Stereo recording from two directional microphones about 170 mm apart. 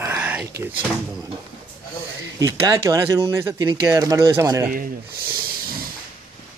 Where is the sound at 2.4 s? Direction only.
20° right (ahead or behind).